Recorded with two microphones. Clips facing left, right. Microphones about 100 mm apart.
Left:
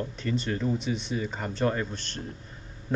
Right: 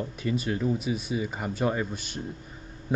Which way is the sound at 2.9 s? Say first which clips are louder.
Right 1 dB; 10° right (ahead or behind).